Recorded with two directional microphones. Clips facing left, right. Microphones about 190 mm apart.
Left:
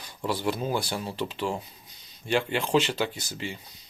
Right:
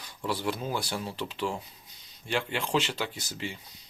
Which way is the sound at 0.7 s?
25° left (ahead or behind).